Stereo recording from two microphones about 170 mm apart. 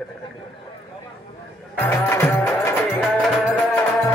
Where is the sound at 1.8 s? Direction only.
10° left (ahead or behind).